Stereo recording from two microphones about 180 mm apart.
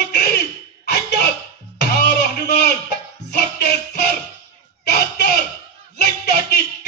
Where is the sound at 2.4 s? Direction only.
65° left (ahead or behind).